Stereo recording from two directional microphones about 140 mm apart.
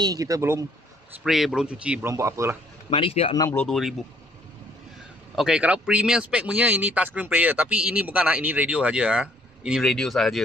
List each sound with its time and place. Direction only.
0.0 s speech: 25° right (ahead or behind)
1.2 s speech: 5° right (ahead or behind)
2.0 s speech: 20° right (ahead or behind)
2.9 s speech: 40° left (ahead or behind)
3.5 s speech: centre (ahead or behind)
5.3 s speech: 5° right (ahead or behind)